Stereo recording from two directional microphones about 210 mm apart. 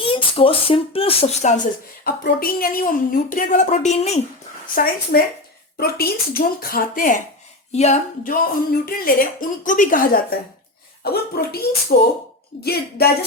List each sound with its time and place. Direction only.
0.0 s speech: 25° left (ahead or behind)
1.6 s speech: 45° left (ahead or behind)
4.7 s speech: 45° left (ahead or behind)